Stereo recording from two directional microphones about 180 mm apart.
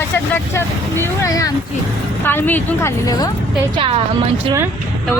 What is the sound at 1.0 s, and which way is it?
A woman's voice, 20° left (ahead or behind).